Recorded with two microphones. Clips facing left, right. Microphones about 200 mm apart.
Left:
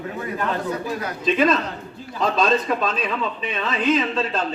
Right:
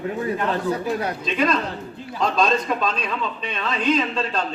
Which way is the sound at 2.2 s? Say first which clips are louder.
Left 1 dB; 5° left (ahead or behind).